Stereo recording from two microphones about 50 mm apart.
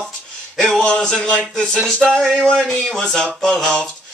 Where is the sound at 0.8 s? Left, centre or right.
Centre.